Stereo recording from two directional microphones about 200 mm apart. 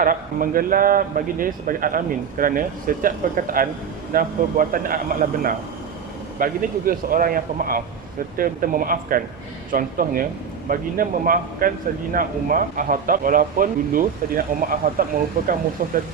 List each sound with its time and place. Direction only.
0.0 s speech: 45° right (ahead or behind)